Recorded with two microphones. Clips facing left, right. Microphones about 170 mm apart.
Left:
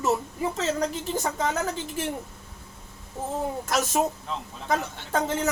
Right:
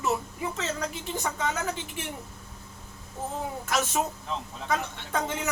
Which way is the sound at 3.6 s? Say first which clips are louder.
Left 2 dB; 40° left (ahead or behind).